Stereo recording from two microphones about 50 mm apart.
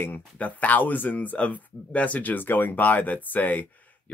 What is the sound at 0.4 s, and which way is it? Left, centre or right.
Speech, left.